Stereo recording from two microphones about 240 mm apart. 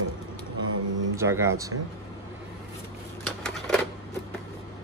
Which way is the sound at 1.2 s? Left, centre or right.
Centre.